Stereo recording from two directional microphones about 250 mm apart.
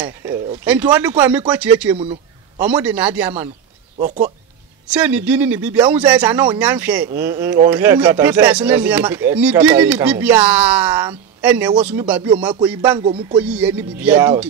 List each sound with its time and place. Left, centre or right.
0.0 s a sound: centre
0.7 s speech: centre
4.0 s speech: right
4.9 s speech: centre
13.4 s speech: centre